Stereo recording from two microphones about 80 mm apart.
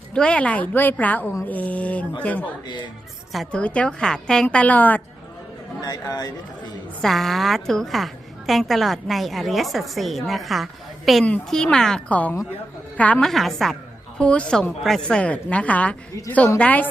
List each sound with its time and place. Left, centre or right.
0.1 s a woman's voice: centre
3.5 s a woman's voice: centre
4.4 s a woman's voice: centre
5.8 s speech: left
7.0 s a woman's voice: centre
12.0 s a woman's voice: centre
13.2 s a woman's voice: centre
14.2 s a woman's voice: centre